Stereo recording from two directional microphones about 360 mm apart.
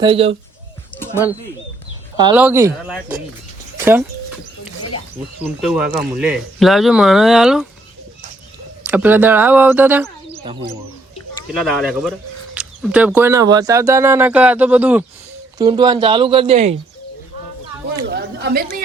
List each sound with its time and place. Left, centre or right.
0.0 s speech: centre
2.1 s speech: centre
5.4 s speech: centre
8.8 s speech: centre
11.5 s speech: centre
18.1 s chatter: right